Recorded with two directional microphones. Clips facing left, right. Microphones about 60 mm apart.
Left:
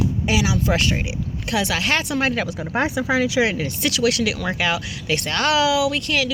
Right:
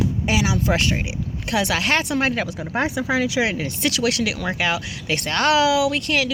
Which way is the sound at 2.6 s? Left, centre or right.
Centre.